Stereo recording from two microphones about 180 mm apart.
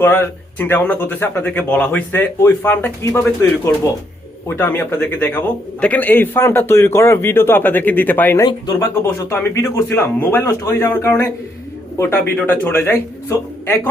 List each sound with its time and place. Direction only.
0.0 s a man's voice: 10° left (ahead or behind)
8.4 s a man's voice: 20° left (ahead or behind)